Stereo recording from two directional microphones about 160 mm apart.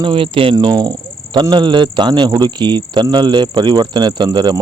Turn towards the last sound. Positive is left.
turn(degrees=-25)  # may be behind; listen again after turning